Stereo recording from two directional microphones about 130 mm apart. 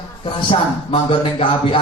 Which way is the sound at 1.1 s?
40° left (ahead or behind).